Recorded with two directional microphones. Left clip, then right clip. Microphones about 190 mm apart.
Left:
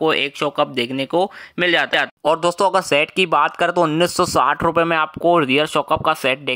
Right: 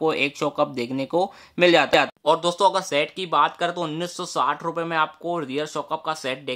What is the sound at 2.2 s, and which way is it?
Speech, 40° left (ahead or behind).